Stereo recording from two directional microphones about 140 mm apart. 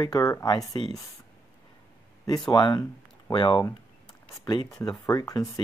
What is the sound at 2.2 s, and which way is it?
Speech, 25° left (ahead or behind).